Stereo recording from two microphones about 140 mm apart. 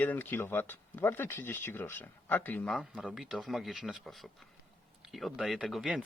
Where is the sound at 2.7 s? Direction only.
5° right (ahead or behind).